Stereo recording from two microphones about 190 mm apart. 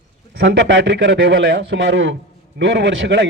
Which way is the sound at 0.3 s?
75° right (ahead or behind).